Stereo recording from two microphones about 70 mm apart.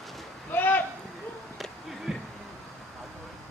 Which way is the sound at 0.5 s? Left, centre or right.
Left.